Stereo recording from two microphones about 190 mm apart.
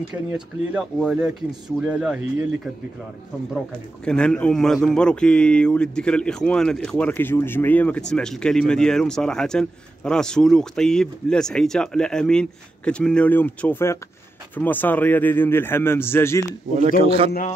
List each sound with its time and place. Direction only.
0.1 s a man's voice: 5° right (ahead or behind)
4.0 s a man's voice: 5° left (ahead or behind)
17.0 s a man's voice: 30° right (ahead or behind)
17.3 s a man's voice: 45° left (ahead or behind)